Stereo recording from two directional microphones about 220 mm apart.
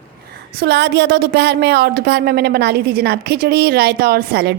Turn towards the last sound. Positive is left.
turn(degrees=-45)  # may be behind; listen again after turning